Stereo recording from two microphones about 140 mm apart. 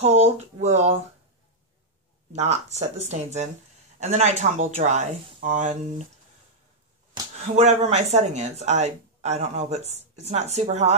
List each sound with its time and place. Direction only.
0.0 s a sound: 50° right (ahead or behind)
2.3 s speech: 50° right (ahead or behind)
7.3 s speech: 55° right (ahead or behind)